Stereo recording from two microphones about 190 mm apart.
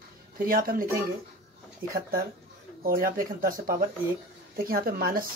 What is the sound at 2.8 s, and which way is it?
Speech, 50° right (ahead or behind).